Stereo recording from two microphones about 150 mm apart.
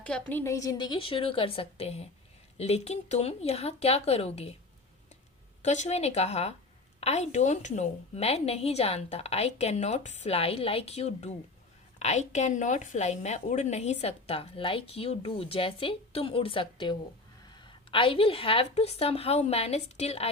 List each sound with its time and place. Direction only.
0.0 s a woman's voice: 10° left (ahead or behind); by 4.4 s 45° left (ahead or behind)
5.6 s a woman's voice: 50° left (ahead or behind)